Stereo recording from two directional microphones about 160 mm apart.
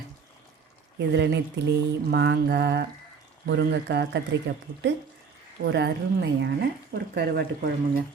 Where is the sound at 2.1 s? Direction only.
90° right.